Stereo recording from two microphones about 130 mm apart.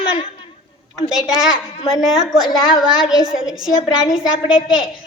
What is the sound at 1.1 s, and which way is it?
A woman's voice, 5° right (ahead or behind).